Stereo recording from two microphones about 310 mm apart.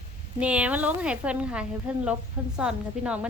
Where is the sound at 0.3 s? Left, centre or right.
Centre.